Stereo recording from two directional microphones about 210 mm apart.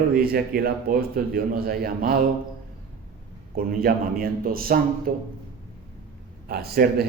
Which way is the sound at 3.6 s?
45° right (ahead or behind).